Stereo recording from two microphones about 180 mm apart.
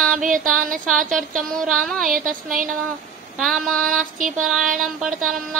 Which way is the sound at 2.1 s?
50° right (ahead or behind).